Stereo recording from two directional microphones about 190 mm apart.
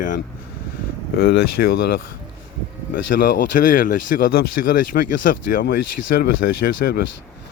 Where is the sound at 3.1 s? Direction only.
45° left (ahead or behind).